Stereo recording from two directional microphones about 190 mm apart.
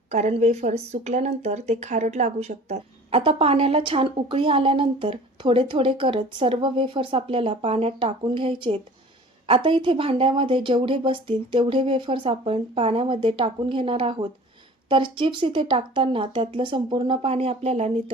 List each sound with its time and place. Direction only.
0.1 s a woman's voice: 35° right (ahead or behind)